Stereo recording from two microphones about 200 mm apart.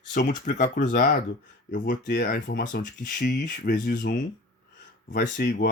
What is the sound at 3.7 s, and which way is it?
Speech, 40° left (ahead or behind).